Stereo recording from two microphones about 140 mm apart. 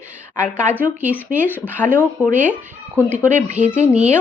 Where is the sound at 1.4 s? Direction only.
15° left (ahead or behind).